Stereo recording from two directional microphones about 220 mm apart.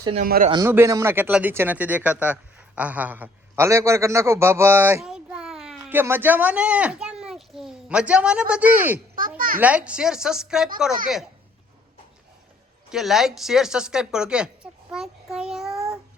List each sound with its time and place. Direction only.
0.2 s a man's voice: 40° right (ahead or behind)
0.5 s speech: 10° right (ahead or behind)
12.9 s speech: centre (ahead or behind)